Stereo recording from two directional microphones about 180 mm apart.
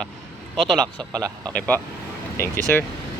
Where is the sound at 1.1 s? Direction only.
20° right (ahead or behind).